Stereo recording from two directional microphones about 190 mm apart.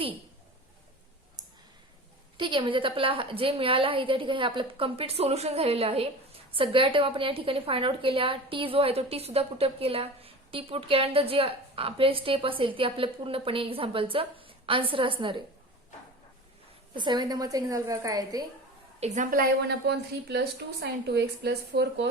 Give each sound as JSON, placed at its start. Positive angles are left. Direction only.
{"t": 2.4, "sound": "a woman's voice", "side_deg": -25}
{"t": 16.9, "sound": "a woman's voice", "side_deg": -25}
{"t": 18.9, "sound": "a woman's voice", "side_deg": -40}